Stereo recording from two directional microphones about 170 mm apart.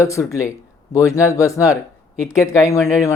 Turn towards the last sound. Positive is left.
turn(degrees=15)  # may be behind; listen again after turning